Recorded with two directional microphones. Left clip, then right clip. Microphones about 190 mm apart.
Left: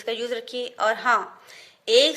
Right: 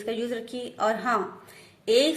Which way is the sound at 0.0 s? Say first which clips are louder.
Left 2 dB; 35° left (ahead or behind).